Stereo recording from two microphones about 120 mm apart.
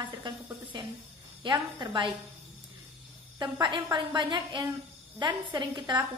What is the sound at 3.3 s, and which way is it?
A woman's voice, 40° right (ahead or behind).